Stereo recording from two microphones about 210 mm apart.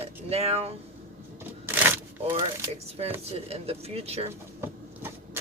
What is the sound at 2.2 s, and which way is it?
Speech, 30° right (ahead or behind).